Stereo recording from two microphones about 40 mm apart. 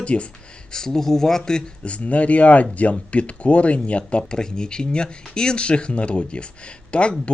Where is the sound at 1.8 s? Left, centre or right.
Left.